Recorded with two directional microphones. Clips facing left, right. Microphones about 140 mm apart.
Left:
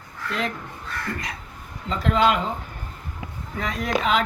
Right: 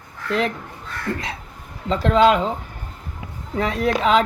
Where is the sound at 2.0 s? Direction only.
30° right (ahead or behind).